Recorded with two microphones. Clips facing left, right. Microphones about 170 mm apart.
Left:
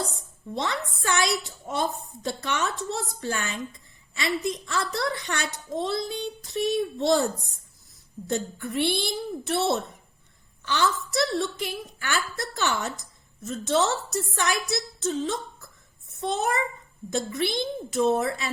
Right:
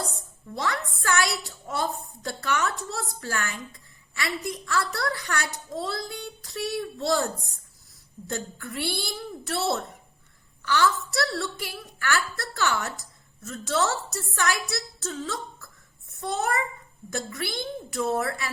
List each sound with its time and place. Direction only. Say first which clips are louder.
0.5 s a woman's voice: even; 20° left (ahead or behind)
8.3 s a woman's voice: left 5 dB; 20° left (ahead or behind)